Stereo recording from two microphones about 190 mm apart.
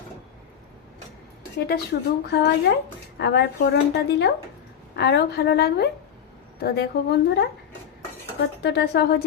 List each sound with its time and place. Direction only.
1.5 s speech: 60° left (ahead or behind)
8.6 s speech: 60° left (ahead or behind)